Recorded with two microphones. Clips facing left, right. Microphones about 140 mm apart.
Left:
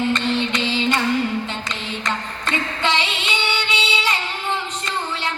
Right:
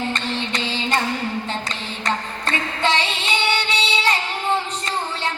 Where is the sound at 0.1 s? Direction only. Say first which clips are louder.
Left 5 dB; 30° right (ahead or behind).